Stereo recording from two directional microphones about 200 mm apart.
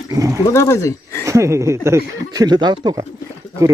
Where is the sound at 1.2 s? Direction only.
15° right (ahead or behind).